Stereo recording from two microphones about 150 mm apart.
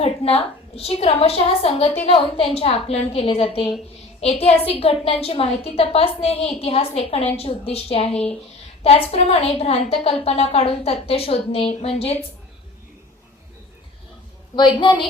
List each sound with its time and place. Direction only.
0.0 s a woman's voice: 40° left (ahead or behind)
14.5 s a woman's voice: 30° left (ahead or behind)